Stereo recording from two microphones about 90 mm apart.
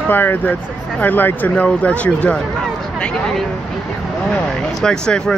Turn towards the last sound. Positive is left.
turn(degrees=10)  # may be behind; listen again after turning